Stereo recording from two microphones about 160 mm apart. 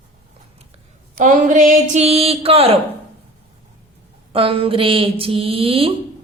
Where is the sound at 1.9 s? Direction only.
40° right (ahead or behind).